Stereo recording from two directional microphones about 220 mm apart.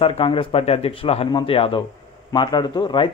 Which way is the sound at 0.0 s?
25° left (ahead or behind).